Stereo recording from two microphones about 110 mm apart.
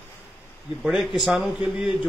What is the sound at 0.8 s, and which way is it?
Speech, centre (ahead or behind).